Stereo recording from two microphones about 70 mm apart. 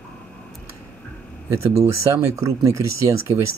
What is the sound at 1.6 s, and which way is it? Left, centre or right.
Speech, right.